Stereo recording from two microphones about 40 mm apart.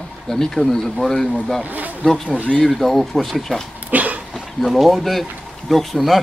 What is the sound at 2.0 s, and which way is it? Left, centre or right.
Speech, left.